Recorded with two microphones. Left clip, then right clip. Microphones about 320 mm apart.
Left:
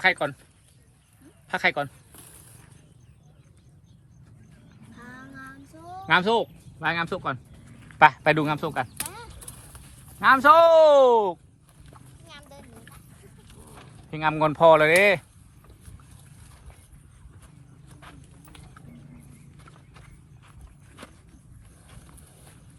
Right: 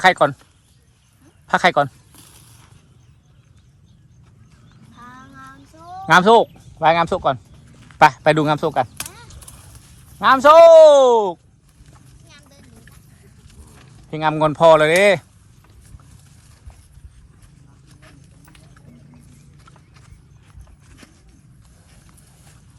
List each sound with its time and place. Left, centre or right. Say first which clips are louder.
0.0 s speech: right 9 dB; centre
1.5 s speech: right 9 dB; centre
4.9 s a sound: right 3 dB; centre
7.9 s a man's voice: right 5 dB; centre
12.3 s a sound: left 2 dB; centre
13.5 s speech: left 1 dB; centre
18.0 s horse: left 1 dB; centre
19.5 s clip-clop: right 2 dB; centre
21.8 s clip-clop: left 1 dB; centre